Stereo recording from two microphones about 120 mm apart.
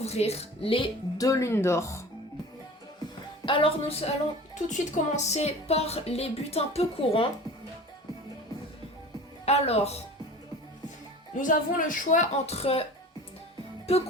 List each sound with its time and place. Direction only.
0.0 s speech: 60° left (ahead or behind)
1.2 s speech: 25° left (ahead or behind)
3.4 s a woman's voice: 50° left (ahead or behind)
4.7 s speech: 75° left (ahead or behind); by 7.3 s 55° left (ahead or behind)
9.5 s speech: 60° left (ahead or behind)
11.3 s speech: 90° left; by 12.8 s 55° left (ahead or behind)
13.9 s speech: 60° left (ahead or behind)